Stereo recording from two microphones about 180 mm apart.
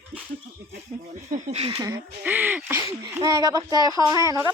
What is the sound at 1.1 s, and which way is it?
Speech, 45° right (ahead or behind).